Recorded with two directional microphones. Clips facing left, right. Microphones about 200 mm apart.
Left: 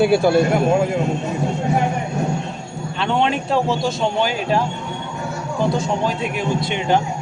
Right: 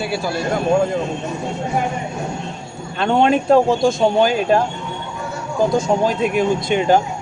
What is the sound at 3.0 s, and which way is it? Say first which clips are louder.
A man's voice: right 5 dB; 45° right (ahead or behind).